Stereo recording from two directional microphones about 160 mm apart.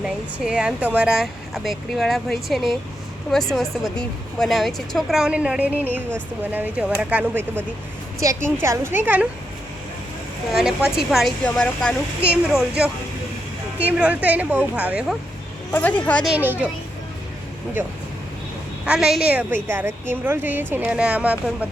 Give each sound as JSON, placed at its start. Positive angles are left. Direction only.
{"t": 0.0, "sound": "speech", "side_deg": -5}
{"t": 10.5, "sound": "speech", "side_deg": -5}
{"t": 12.2, "sound": "speech", "side_deg": -5}
{"t": 15.7, "sound": "speech", "side_deg": 10}
{"t": 16.3, "sound": "speech", "side_deg": -10}
{"t": 18.9, "sound": "speech", "side_deg": -5}